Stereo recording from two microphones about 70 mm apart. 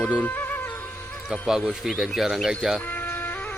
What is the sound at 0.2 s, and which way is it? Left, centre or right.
Music, left.